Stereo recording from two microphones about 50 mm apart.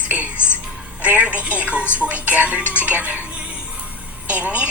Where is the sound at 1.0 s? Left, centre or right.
Right.